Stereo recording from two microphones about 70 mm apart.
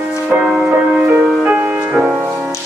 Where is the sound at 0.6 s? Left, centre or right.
Centre.